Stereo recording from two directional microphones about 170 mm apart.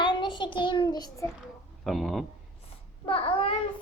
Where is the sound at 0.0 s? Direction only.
25° left (ahead or behind).